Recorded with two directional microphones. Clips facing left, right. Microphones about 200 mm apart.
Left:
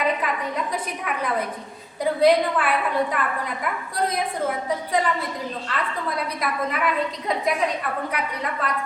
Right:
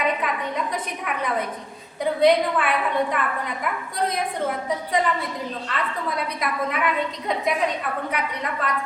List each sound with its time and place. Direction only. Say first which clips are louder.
0.0 s a woman's voice: even; centre (ahead or behind)